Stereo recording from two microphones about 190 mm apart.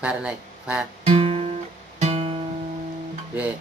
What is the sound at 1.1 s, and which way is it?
Guitar, 30° right (ahead or behind).